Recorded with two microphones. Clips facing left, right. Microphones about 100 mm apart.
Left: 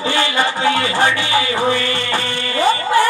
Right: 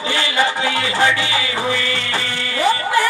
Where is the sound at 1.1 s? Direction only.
20° right (ahead or behind).